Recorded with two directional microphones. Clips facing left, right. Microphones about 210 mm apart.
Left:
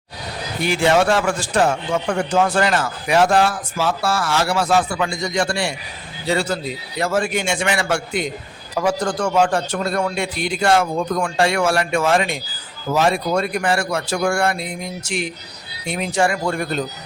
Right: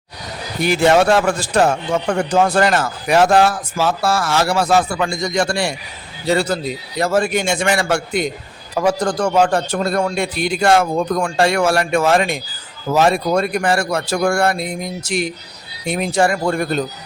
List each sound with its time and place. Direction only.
0.6 s a man's voice: 40° right (ahead or behind)